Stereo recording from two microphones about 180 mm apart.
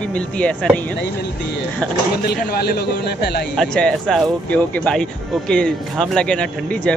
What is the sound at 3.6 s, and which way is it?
Speech, 5° left (ahead or behind).